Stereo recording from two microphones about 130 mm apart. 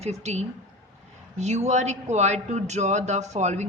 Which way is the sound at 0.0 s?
55° right (ahead or behind).